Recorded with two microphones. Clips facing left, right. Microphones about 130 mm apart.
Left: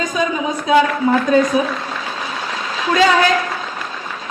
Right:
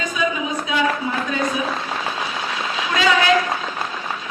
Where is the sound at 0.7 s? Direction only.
40° left (ahead or behind).